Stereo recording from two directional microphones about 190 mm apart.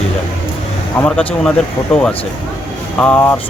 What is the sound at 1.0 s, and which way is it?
Speech, 5° left (ahead or behind).